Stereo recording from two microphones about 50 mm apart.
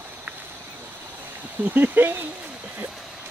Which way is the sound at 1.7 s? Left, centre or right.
Right.